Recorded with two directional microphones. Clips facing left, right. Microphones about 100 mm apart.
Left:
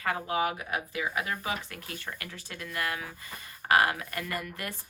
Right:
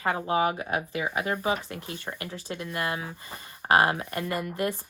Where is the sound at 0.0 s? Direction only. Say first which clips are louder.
Right 4 dB; 30° right (ahead or behind).